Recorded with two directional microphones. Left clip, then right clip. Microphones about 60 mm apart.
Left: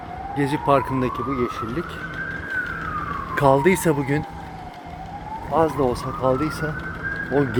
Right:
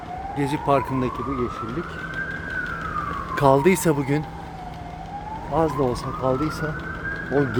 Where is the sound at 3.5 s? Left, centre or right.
Right.